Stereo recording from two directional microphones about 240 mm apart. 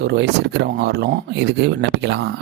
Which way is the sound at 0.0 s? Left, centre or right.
Right.